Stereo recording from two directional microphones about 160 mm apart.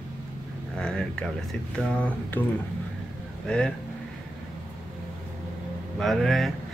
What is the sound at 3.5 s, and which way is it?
Mantra, 5° left (ahead or behind).